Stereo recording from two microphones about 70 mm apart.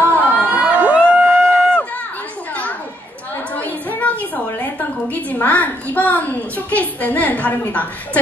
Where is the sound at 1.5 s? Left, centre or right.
Centre.